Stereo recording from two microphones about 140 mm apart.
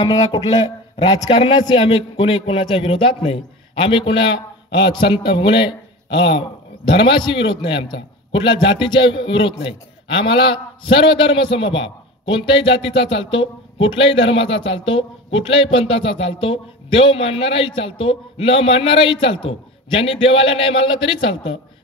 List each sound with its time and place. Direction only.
0.3 s a man's voice: 30° left (ahead or behind)